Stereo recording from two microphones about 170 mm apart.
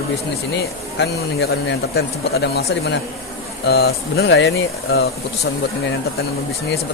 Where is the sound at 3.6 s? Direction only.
70° left (ahead or behind); by 4.5 s 90° left.